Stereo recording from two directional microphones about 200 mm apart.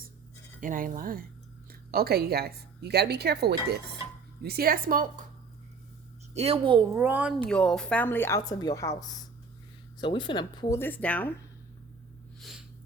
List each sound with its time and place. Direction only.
0.6 s speech: 45° right (ahead or behind)
6.3 s a woman's voice: 30° right (ahead or behind)
6.9 s a woman's voice: 10° right (ahead or behind); by 11.3 s 10° left (ahead or behind)
12.4 s snort: centre (ahead or behind)